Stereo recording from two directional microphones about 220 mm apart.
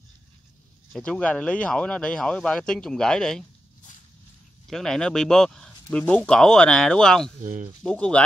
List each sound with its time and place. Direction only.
0.9 s speech: 5° left (ahead or behind)
4.6 s speech: centre (ahead or behind)
7.4 s speech: 35° right (ahead or behind)
7.8 s speech: 5° left (ahead or behind)